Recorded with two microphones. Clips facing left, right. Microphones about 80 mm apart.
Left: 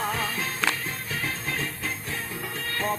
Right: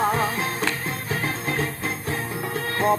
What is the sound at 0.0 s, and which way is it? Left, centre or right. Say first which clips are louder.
Music: right 6 dB; right.